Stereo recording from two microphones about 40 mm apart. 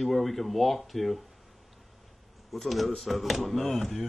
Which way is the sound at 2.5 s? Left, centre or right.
Centre.